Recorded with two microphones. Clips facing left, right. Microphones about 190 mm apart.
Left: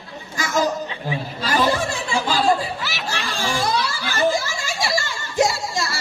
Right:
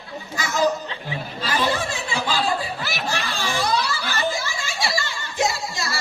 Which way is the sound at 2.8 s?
50° right (ahead or behind).